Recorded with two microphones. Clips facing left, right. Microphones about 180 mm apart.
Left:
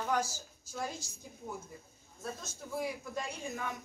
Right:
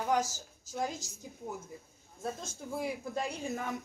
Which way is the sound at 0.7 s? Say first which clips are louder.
Right 4 dB; 20° right (ahead or behind).